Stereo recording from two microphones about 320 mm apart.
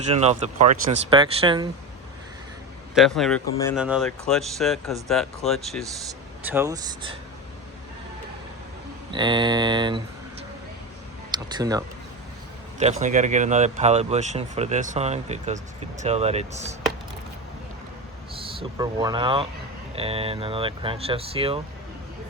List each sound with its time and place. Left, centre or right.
0.1 s speech: centre
2.9 s speech: centre
9.1 s speech: centre
11.3 s speech: centre
12.8 s speech: right
18.3 s speech: centre